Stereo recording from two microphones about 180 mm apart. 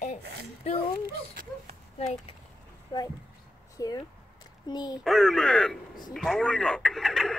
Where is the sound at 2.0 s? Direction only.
35° left (ahead or behind).